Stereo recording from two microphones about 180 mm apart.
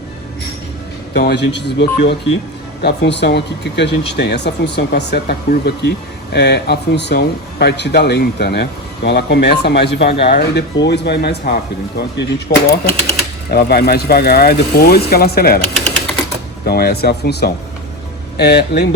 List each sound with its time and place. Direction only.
1.1 s speech: 70° left (ahead or behind)
16.6 s speech: 60° left (ahead or behind)